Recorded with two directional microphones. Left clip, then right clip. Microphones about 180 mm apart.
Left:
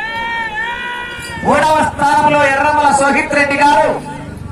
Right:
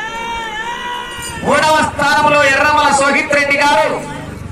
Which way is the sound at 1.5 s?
35° left (ahead or behind).